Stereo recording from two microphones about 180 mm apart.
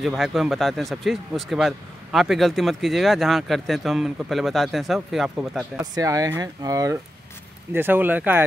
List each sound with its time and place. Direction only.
0.0 s a man's voice: centre (ahead or behind)
5.9 s speech: 20° right (ahead or behind)